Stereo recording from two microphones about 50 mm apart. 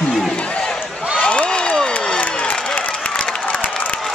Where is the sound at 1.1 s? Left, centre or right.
Centre.